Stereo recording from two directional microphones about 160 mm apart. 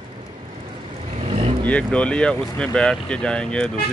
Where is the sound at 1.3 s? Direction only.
35° right (ahead or behind).